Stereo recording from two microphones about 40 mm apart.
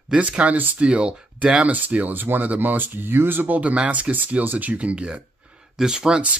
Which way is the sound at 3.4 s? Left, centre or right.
Right.